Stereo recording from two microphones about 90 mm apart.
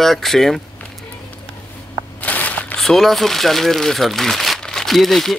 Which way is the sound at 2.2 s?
15° left (ahead or behind).